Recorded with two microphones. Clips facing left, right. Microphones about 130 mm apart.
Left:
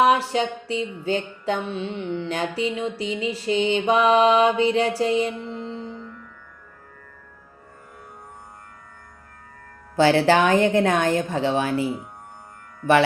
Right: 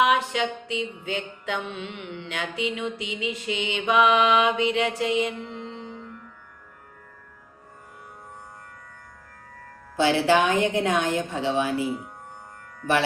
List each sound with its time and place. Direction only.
0.0 s mantra: 35° left (ahead or behind)
10.2 s a woman's voice: 60° left (ahead or behind)